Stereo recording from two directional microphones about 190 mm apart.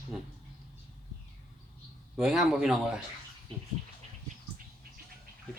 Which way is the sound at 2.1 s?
Centre (ahead or behind).